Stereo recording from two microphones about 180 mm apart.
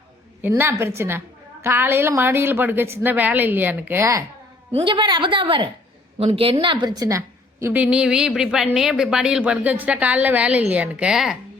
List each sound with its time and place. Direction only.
0.4 s a woman's voice: 15° right (ahead or behind)
4.7 s a woman's voice: 30° right (ahead or behind); by 11.3 s 5° right (ahead or behind)